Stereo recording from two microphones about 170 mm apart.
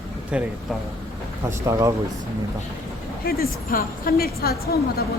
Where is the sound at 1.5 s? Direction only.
20° right (ahead or behind).